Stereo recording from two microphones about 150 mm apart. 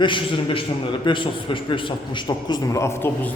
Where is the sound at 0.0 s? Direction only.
35° left (ahead or behind).